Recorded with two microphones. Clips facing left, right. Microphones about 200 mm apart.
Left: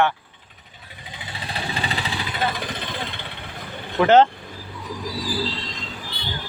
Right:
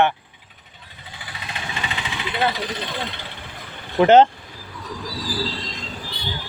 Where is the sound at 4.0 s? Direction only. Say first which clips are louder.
Right 2 dB; 20° right (ahead or behind).